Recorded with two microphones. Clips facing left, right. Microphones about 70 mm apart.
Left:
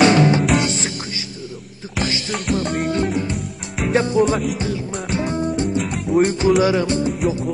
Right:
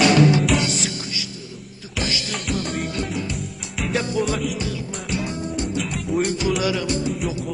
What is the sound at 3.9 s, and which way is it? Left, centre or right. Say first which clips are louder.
Music: left 6 dB; left.